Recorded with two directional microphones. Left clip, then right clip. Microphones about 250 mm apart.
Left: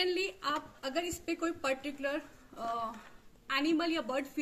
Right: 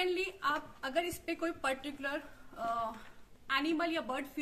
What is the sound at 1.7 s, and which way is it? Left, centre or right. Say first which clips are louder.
Speech: left 2 dB; right.